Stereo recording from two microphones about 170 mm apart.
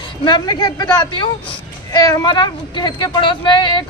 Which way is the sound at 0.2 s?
25° left (ahead or behind).